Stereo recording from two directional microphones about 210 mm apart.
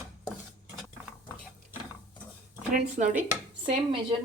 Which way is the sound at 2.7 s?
35° right (ahead or behind).